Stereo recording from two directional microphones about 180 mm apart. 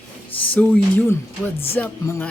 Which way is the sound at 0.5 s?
10° left (ahead or behind).